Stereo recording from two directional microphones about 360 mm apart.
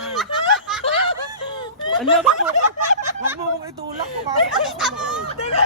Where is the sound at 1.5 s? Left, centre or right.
Centre.